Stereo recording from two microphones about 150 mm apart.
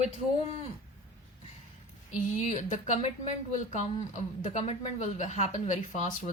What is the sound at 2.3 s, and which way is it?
Speech, 50° left (ahead or behind).